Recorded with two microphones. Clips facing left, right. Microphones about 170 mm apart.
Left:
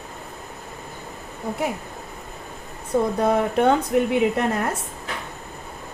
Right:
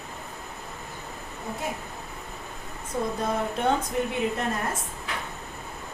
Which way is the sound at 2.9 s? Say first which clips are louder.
Left 8 dB; 70° left (ahead or behind).